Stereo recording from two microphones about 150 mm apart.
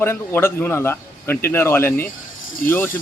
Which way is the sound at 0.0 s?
15° left (ahead or behind).